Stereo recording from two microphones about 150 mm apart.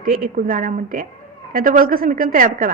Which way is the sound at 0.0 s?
65° right (ahead or behind).